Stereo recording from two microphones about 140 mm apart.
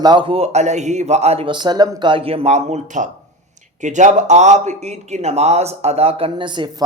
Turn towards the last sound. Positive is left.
turn(degrees=-35)  # may be behind; listen again after turning